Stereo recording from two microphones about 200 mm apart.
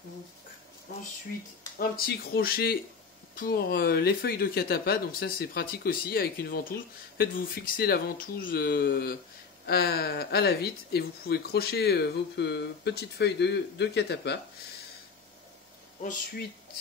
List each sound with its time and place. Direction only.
1.8 s speech: 50° left (ahead or behind)